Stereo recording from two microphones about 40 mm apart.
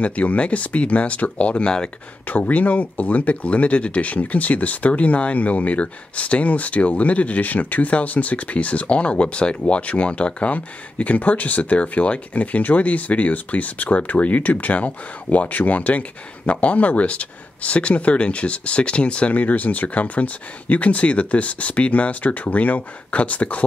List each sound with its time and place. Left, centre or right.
0.0 s speech: left
2.2 s speech: left
19.4 s speech: left